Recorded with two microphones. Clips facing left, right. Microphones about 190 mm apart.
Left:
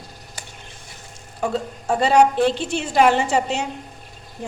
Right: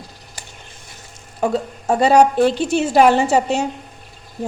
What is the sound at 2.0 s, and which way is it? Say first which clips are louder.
A woman's voice: right 3 dB; 40° right (ahead or behind).